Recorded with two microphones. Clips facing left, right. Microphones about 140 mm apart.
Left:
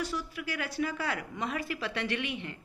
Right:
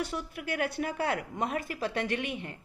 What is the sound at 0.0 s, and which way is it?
A woman's voice, 55° right (ahead or behind).